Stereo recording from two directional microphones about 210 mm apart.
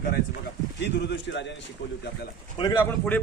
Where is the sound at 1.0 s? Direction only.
55° left (ahead or behind).